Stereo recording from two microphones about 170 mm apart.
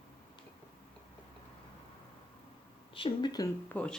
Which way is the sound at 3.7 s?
10° left (ahead or behind).